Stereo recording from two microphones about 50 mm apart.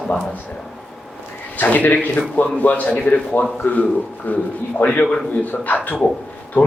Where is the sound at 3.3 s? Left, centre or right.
Left.